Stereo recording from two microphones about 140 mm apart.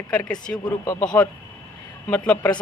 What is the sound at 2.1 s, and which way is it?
Speech, 10° left (ahead or behind).